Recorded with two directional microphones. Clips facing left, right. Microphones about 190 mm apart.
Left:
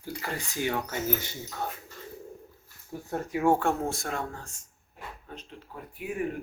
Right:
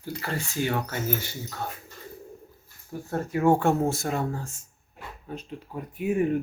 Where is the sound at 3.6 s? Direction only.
Centre (ahead or behind).